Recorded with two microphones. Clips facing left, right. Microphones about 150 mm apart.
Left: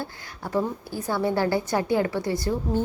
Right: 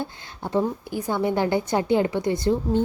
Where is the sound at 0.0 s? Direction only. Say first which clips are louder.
Right 3 dB; 20° right (ahead or behind).